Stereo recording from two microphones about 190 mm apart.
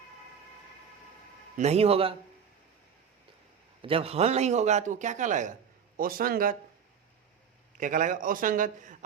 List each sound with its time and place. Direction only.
1.5 s a man's voice: 35° right (ahead or behind)
3.8 s a man's voice: 30° right (ahead or behind); by 6.6 s 50° right (ahead or behind)
7.8 s a man's voice: 45° right (ahead or behind)